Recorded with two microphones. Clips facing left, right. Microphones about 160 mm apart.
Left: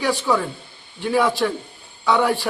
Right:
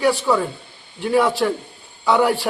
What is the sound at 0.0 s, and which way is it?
A man's voice, centre (ahead or behind).